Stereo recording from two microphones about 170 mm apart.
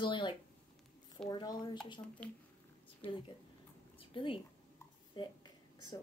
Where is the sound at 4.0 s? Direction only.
30° left (ahead or behind).